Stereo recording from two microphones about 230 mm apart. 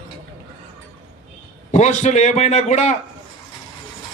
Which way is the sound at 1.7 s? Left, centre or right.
Left.